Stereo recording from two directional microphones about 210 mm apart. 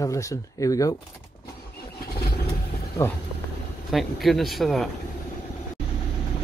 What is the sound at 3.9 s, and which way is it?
Speech, centre (ahead or behind).